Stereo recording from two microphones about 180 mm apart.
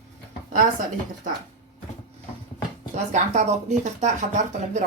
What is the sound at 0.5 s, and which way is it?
Speech, 50° right (ahead or behind).